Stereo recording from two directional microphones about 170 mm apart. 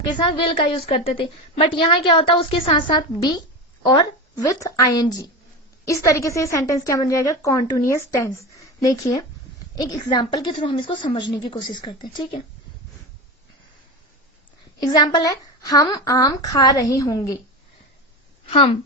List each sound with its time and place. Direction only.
0.1 s a woman's voice: 30° left (ahead or behind)
14.8 s a woman's voice: 25° left (ahead or behind)
18.5 s a woman's voice: 30° left (ahead or behind)